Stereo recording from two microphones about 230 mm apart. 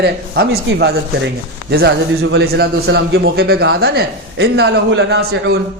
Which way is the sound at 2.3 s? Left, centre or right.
Right.